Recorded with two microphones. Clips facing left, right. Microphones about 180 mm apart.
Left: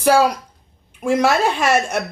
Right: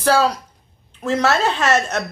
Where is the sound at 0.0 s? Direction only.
10° left (ahead or behind).